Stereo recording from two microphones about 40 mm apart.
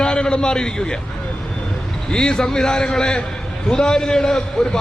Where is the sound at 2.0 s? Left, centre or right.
Centre.